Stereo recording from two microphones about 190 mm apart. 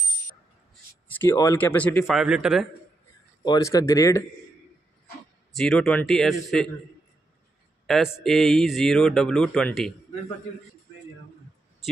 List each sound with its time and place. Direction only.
1.0 s speech: 15° left (ahead or behind)
2.1 s a man's voice: 5° right (ahead or behind)
3.4 s speech: 20° left (ahead or behind)
5.5 s a man's voice: 5° left (ahead or behind)
7.8 s a man's voice: centre (ahead or behind)